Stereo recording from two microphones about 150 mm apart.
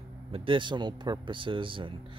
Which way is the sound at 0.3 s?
35° right (ahead or behind).